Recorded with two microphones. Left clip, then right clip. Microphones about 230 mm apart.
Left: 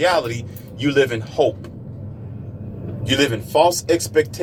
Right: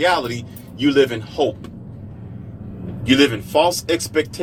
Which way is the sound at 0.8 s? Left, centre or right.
Right.